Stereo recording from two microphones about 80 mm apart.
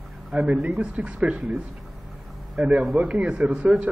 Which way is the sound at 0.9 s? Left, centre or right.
Centre.